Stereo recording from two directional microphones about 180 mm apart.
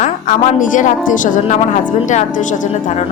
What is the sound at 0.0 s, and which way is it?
A woman's voice, 45° left (ahead or behind).